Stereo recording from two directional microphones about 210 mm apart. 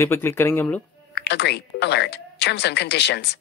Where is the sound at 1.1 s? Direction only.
55° left (ahead or behind).